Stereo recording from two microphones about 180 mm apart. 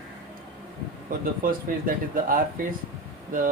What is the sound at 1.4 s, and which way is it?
Speech, 50° right (ahead or behind).